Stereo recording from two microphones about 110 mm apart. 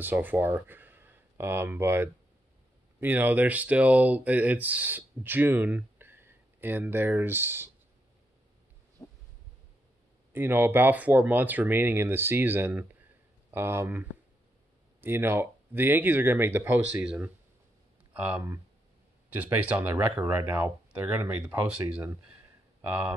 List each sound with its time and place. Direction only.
0.0 s speech: 15° right (ahead or behind)
10.3 s speech: 20° right (ahead or behind)
22.8 s speech: 20° right (ahead or behind)